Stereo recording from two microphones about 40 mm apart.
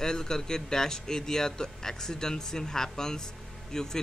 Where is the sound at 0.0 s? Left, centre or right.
Centre.